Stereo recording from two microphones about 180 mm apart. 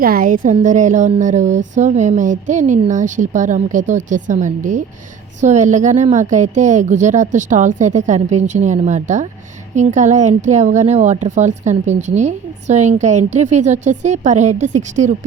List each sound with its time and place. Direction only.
0.0 s a woman's voice: 55° right (ahead or behind)